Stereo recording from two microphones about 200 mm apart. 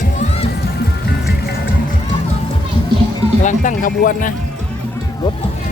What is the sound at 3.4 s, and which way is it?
Music, 40° left (ahead or behind).